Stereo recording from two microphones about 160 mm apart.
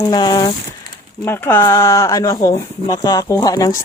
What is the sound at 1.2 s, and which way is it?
Speech, 15° left (ahead or behind).